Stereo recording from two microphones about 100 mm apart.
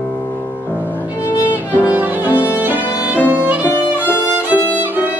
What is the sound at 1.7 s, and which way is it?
Violin, 15° right (ahead or behind).